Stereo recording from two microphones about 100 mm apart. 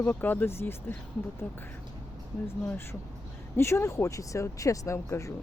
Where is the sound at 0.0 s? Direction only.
20° left (ahead or behind).